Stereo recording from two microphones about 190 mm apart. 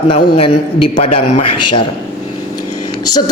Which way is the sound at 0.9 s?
35° left (ahead or behind).